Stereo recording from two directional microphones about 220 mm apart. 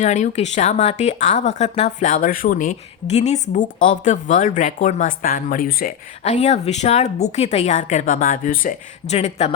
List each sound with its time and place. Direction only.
0.0 s speech: 30° left (ahead or behind)